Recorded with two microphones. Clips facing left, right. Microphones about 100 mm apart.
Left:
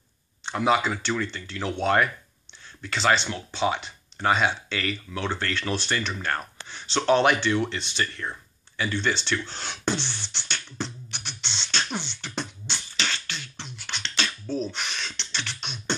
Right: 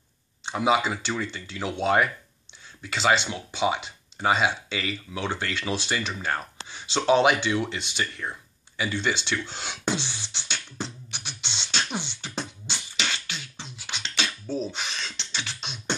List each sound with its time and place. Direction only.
0.5 s speech: 10° right (ahead or behind)
9.5 s beatboxing: 10° right (ahead or behind)
15.3 s music: 5° right (ahead or behind)